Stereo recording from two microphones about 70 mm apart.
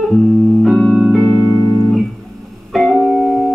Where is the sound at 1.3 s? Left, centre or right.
Centre.